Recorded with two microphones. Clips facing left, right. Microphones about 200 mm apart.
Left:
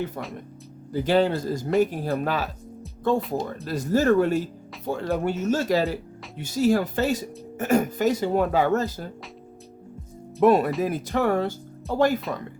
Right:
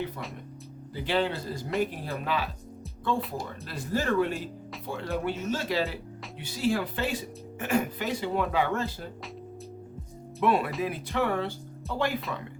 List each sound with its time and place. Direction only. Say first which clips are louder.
0.2 s speech: left 5 dB; 45° left (ahead or behind)
10.4 s speech: left 7 dB; 40° left (ahead or behind)